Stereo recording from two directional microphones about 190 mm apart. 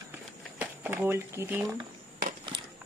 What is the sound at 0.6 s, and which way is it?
Speech, 10° right (ahead or behind).